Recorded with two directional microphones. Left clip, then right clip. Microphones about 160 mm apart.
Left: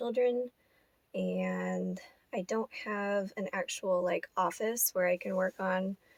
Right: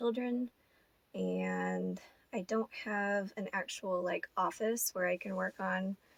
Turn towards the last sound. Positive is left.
turn(degrees=40)  # may be behind; listen again after turning